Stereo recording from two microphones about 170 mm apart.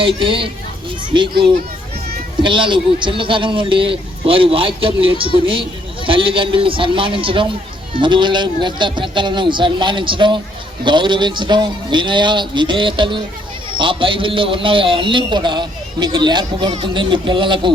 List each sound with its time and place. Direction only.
0.2 s a man's voice: 30° right (ahead or behind)
2.4 s a man's voice: 30° right (ahead or behind)